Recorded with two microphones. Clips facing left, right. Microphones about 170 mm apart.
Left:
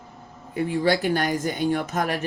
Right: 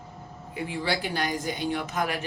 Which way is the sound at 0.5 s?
45° left (ahead or behind).